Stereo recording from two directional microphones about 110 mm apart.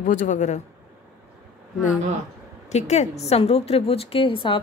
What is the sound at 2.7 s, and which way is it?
A woman's voice, 90° left.